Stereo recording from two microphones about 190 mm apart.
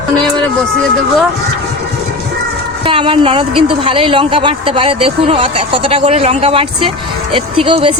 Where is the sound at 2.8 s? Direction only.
25° right (ahead or behind).